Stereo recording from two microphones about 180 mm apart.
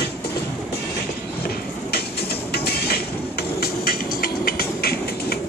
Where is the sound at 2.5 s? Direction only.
60° left (ahead or behind).